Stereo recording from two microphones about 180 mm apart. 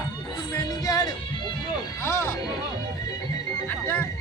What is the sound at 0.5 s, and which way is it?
Music, 20° left (ahead or behind).